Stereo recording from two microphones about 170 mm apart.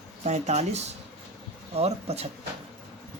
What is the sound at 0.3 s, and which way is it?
Speech, 40° right (ahead or behind).